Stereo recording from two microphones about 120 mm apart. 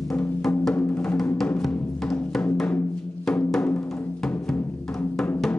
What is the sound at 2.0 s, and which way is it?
Music, 5° left (ahead or behind).